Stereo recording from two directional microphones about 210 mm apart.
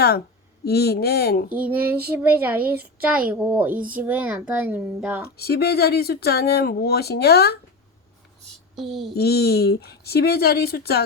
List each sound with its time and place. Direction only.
0.6 s speech: 50° left (ahead or behind)
1.5 s speech: 5° right (ahead or behind)
5.4 s speech: 50° left (ahead or behind)
8.4 s a sound: centre (ahead or behind)
9.1 s speech: 50° left (ahead or behind)